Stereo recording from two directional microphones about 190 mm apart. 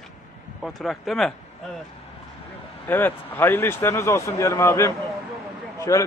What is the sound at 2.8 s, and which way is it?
Speech, 10° left (ahead or behind).